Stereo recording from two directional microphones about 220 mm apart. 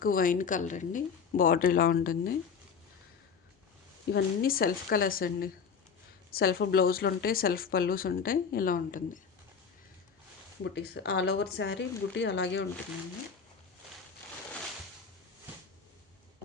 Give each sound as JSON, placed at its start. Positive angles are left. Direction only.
{"t": 0.0, "sound": "speech", "side_deg": 40}
{"t": 4.1, "sound": "speech", "side_deg": 40}
{"t": 10.6, "sound": "speech", "side_deg": 50}